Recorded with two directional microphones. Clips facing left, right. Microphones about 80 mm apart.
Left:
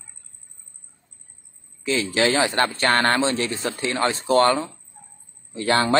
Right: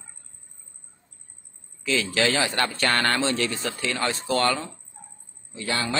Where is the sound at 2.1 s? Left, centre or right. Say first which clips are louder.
Left 5 dB; left.